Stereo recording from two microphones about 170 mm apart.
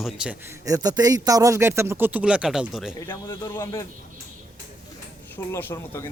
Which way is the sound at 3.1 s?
15° left (ahead or behind).